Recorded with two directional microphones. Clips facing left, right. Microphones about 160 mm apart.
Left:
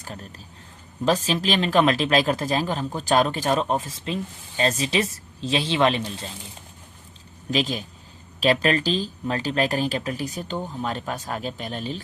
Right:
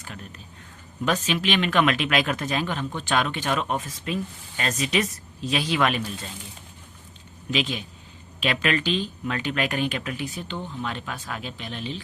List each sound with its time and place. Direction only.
0.0 s speech: 35° left (ahead or behind)
7.5 s speech: 40° left (ahead or behind)